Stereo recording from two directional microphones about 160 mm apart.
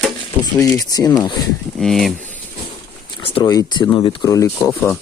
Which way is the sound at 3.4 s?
20° left (ahead or behind).